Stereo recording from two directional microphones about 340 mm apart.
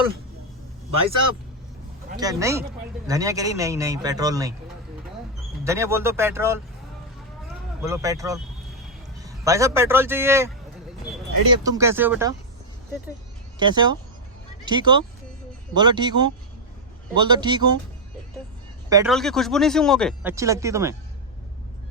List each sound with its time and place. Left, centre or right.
2.1 s a man's voice: centre
5.6 s a man's voice: centre
7.8 s a man's voice: centre
11.6 s a man's voice: centre
13.6 s a man's voice: centre
18.9 s speech: centre
19.1 s speech: centre
20.3 s a man's voice: centre